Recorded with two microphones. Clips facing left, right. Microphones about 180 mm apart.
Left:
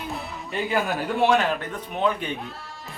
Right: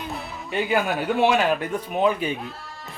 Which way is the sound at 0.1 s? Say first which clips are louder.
Right 1 dB; centre (ahead or behind).